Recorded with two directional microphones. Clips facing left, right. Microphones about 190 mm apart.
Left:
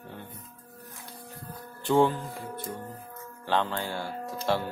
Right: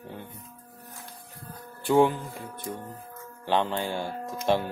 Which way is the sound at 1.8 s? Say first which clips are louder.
Right 2 dB; 15° right (ahead or behind).